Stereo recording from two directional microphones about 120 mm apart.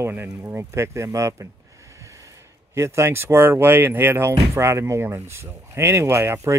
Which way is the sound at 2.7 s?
25° right (ahead or behind).